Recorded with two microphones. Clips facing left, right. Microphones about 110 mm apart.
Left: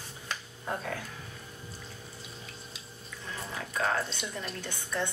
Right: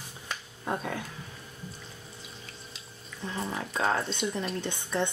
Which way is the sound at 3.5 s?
25° right (ahead or behind).